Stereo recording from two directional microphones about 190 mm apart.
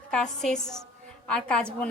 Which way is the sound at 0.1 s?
5° left (ahead or behind).